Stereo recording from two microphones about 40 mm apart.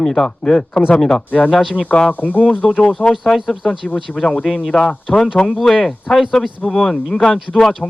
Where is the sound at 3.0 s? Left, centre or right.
Centre.